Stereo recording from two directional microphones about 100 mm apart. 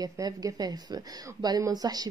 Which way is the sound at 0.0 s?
35° right (ahead or behind).